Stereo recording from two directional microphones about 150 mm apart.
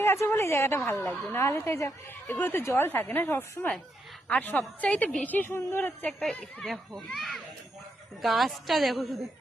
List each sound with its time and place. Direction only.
0.0 s a woman's voice: 15° left (ahead or behind); by 9.2 s centre (ahead or behind)